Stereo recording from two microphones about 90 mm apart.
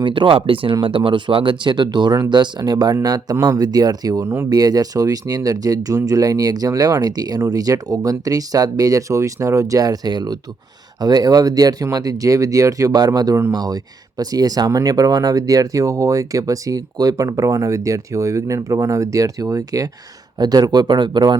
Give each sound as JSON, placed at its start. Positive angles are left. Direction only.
{"t": 0.0, "sound": "speech", "side_deg": -65}
{"t": 4.2, "sound": "speech", "side_deg": -30}
{"t": 4.4, "sound": "speech", "side_deg": -45}